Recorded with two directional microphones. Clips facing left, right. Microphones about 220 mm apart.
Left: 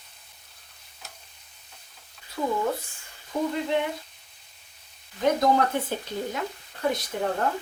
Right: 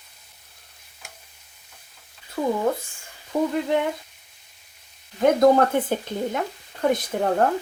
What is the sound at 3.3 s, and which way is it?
Frying, 65° right (ahead or behind).